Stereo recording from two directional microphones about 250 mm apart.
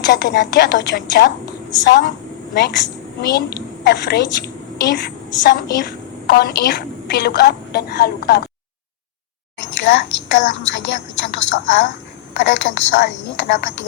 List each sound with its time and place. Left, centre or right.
0.0 s a woman's voice: left
9.6 s a woman's voice: left